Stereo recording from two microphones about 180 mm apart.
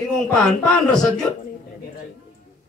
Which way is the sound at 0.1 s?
5° left (ahead or behind).